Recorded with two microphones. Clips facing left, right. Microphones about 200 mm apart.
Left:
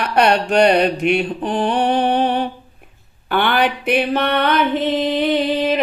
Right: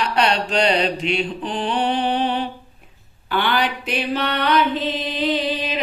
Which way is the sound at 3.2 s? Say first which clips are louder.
Left 4 dB; 55° left (ahead or behind).